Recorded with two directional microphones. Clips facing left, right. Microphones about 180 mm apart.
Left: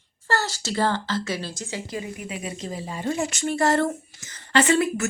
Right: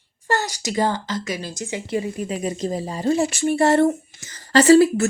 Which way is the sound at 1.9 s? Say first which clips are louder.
Right 7 dB; 30° right (ahead or behind).